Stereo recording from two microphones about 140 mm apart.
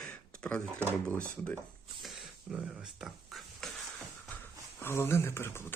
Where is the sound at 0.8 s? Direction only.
15° right (ahead or behind).